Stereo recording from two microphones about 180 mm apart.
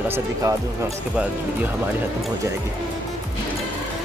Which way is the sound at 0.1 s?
15° right (ahead or behind).